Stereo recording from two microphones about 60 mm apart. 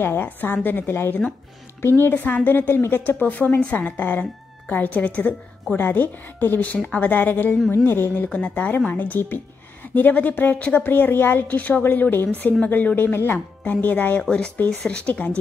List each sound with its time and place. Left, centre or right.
0.0 s a woman's voice: left
2.1 s a woman's voice: left